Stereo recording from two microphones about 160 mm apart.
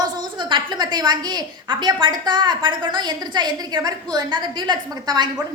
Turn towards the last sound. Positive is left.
turn(degrees=-25)  # may be behind; listen again after turning